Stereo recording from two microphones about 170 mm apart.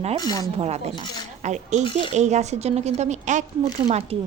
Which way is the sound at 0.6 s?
40° right (ahead or behind).